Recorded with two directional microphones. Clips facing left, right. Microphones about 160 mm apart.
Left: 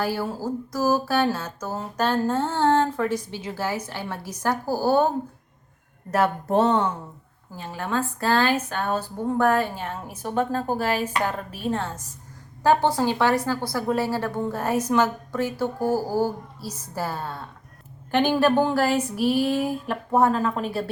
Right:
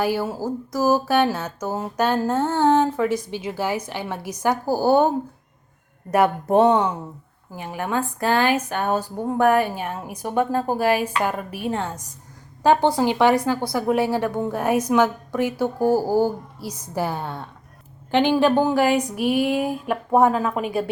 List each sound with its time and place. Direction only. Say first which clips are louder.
0.0 s speech: right 3 dB; 15° right (ahead or behind)
6.1 s speech: right 4 dB; 15° right (ahead or behind)
18.3 s speech: right 1 dB; 15° right (ahead or behind)